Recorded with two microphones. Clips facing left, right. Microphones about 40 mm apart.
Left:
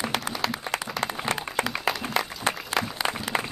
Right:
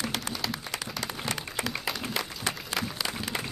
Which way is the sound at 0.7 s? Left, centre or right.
Left.